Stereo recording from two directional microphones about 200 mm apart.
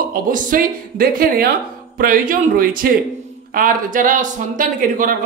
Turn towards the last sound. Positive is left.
turn(degrees=-45)  # may be behind; listen again after turning